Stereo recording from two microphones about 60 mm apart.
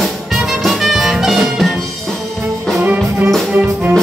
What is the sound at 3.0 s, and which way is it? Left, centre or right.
Music, right.